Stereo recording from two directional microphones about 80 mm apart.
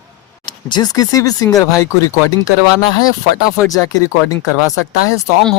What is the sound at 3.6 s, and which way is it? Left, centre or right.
Speech, left.